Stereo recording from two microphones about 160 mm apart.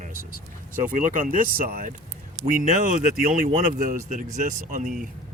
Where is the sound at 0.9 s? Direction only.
55° right (ahead or behind).